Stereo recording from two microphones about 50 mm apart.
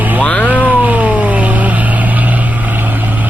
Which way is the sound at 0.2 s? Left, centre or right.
Left.